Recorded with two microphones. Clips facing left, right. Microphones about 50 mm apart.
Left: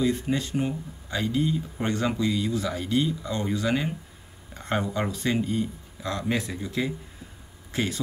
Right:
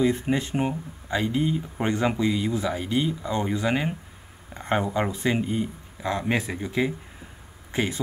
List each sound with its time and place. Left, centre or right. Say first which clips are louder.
0.0 s speech: right 2 dB; right